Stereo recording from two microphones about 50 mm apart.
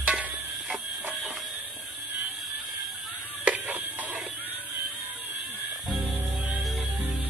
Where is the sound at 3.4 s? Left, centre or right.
Right.